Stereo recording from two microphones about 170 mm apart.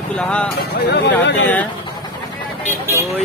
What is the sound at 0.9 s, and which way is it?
Speech, 85° left.